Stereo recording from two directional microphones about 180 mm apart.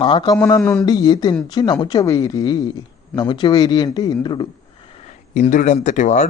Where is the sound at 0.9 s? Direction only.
20° left (ahead or behind).